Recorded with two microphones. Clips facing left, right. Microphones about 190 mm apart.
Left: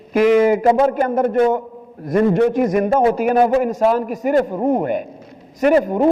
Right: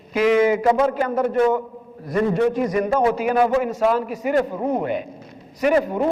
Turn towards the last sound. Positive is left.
turn(degrees=45)  # may be behind; listen again after turning